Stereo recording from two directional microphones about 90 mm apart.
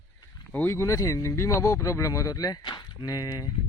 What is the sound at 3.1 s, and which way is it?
Speech, 40° left (ahead or behind).